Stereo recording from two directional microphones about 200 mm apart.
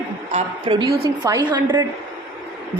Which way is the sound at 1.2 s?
20° right (ahead or behind).